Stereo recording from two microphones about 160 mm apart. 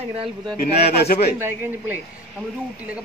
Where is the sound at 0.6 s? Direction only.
75° left (ahead or behind).